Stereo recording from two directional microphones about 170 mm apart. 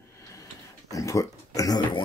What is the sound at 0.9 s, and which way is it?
Speech, 20° left (ahead or behind).